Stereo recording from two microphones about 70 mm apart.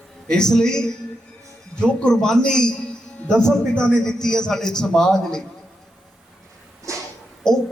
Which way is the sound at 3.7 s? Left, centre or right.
Centre.